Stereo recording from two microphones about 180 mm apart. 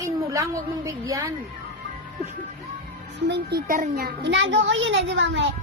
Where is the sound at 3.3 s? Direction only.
60° right (ahead or behind); by 5.5 s 85° right.